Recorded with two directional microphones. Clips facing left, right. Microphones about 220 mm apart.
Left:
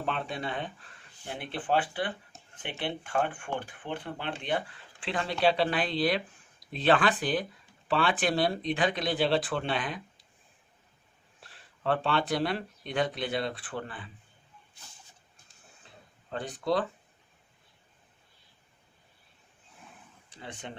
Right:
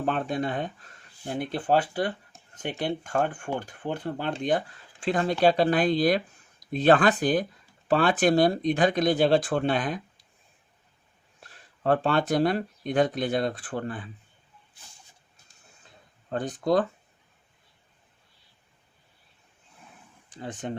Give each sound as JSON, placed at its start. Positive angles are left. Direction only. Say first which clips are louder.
{"t": 0.0, "sound": "speech", "louder": "right 6 dB", "side_deg": -45}
{"t": 11.4, "sound": "speech", "louder": "right 5 dB", "side_deg": -45}
{"t": 16.3, "sound": "speech", "louder": "right 5 dB", "side_deg": -45}
{"t": 20.3, "sound": "speech", "louder": "right 8 dB", "side_deg": -45}